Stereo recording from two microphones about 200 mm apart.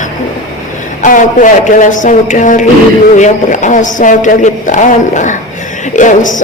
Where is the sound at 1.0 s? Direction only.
40° left (ahead or behind).